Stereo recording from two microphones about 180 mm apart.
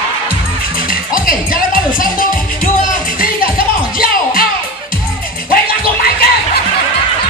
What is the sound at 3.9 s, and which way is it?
Music, 55° left (ahead or behind).